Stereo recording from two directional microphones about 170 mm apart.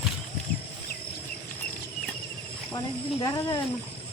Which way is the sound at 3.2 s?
20° left (ahead or behind).